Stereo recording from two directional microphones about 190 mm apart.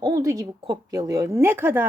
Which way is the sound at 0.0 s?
15° right (ahead or behind).